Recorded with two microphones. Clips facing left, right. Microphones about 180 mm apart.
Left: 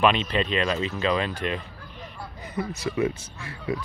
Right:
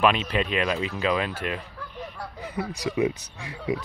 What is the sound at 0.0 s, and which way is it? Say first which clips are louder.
Speech: even; 5° right (ahead or behind).